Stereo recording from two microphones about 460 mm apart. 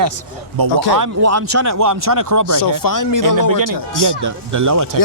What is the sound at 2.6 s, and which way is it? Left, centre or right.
Speech, left.